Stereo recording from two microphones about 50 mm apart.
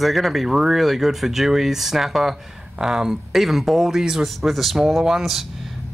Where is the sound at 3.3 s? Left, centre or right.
Centre.